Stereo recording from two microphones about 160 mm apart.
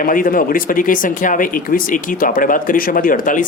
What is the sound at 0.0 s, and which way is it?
Speech, 60° left (ahead or behind).